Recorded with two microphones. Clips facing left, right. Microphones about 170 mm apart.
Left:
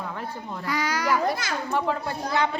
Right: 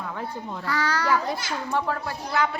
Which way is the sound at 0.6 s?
15° left (ahead or behind).